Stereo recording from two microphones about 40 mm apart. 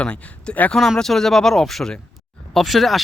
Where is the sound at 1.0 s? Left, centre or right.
Centre.